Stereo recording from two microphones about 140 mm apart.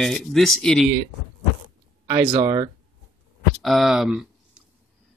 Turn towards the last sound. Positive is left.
turn(degrees=-5)  # may be behind; listen again after turning